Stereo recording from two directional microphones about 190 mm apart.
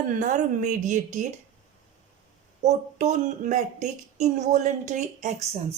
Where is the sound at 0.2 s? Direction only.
40° right (ahead or behind).